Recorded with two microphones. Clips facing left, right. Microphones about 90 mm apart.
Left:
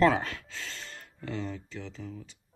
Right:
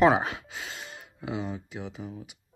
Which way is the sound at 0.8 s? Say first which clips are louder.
Right 3 dB; 10° right (ahead or behind).